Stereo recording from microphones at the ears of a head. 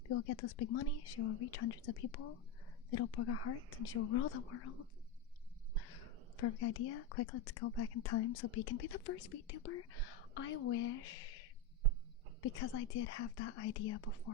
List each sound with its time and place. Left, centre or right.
0.1 s speech: left